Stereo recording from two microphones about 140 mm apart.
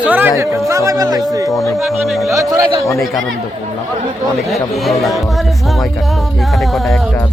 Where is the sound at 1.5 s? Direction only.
Centre (ahead or behind).